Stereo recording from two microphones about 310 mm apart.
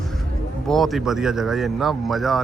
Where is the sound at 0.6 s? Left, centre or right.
Centre.